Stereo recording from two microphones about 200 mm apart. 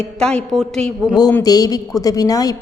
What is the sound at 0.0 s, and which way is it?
A woman's voice, 5° left (ahead or behind).